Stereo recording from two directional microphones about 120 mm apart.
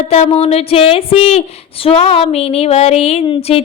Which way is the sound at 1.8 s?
50° left (ahead or behind).